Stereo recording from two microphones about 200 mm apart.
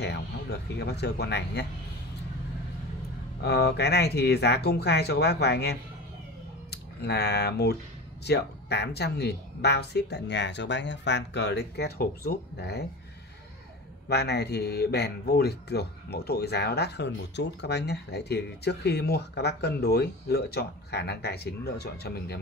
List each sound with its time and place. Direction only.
0.0 s speech: 55° left (ahead or behind)
3.4 s speech: 55° left (ahead or behind)
14.0 s speech: 55° left (ahead or behind)